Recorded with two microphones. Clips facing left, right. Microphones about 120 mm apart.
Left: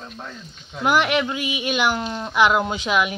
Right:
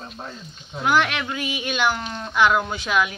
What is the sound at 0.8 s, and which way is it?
Speech, 15° left (ahead or behind).